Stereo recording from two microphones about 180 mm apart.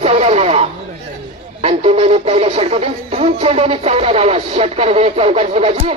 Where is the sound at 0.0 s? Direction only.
35° right (ahead or behind).